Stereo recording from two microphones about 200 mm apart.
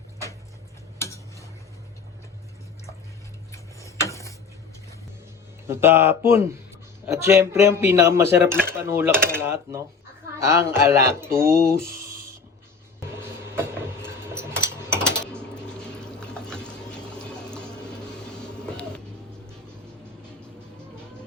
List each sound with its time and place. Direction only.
0.9 s stir: 15° left (ahead or behind)
3.5 s a sound: 15° left (ahead or behind)
5.6 s coin: 10° right (ahead or behind)
7.0 s speech: 15° right (ahead or behind)
7.5 s coin: 10° right (ahead or behind)
14.8 s a sound: 5° left (ahead or behind)
16.0 s stir: 5° left (ahead or behind)
18.6 s music: 5° left (ahead or behind)